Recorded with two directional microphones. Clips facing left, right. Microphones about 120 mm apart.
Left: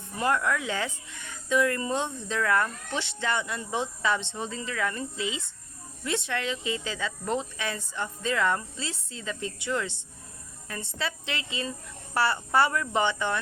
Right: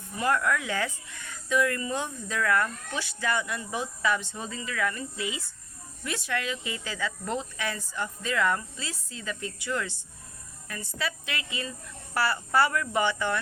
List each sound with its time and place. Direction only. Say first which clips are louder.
0.2 s speech: even; 25° left (ahead or behind)